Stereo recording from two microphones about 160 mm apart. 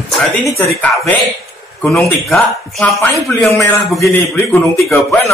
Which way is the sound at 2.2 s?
Centre (ahead or behind).